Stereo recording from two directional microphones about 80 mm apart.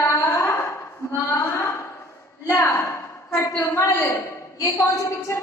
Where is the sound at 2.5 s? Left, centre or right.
Left.